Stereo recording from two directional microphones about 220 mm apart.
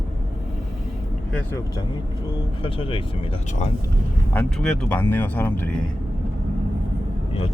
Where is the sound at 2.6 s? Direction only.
25° left (ahead or behind).